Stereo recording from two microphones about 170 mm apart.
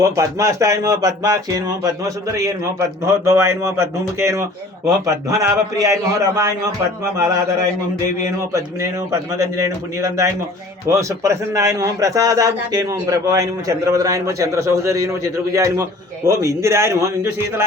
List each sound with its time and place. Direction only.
0.0 s a man's voice: 20° right (ahead or behind)
8.2 s a man's voice: 20° right (ahead or behind)